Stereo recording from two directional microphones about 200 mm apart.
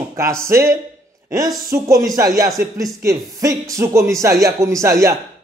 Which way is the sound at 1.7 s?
15° right (ahead or behind).